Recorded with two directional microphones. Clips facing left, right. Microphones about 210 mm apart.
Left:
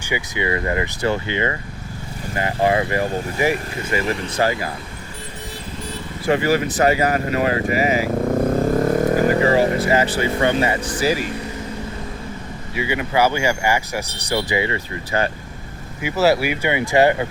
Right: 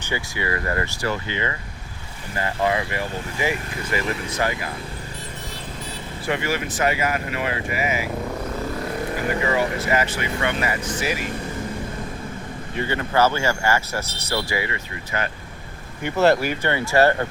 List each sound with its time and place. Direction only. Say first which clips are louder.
0.0 s speech: left 4 dB; 15° left (ahead or behind)
2.6 s speech: left 5 dB; 35° left (ahead or behind)
6.2 s speech: left 7 dB; 40° left (ahead or behind)
12.7 s speech: left 2 dB; 10° left (ahead or behind); by 15.3 s 30° left (ahead or behind)
16.0 s speech: left 1 dB; 5° left (ahead or behind)